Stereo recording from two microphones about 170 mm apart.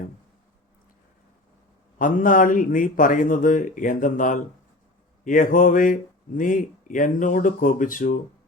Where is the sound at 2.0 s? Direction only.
50° left (ahead or behind).